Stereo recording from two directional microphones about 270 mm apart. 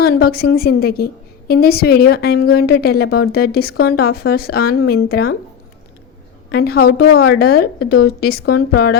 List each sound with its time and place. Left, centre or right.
0.0 s a woman's voice: left
6.5 s a woman's voice: left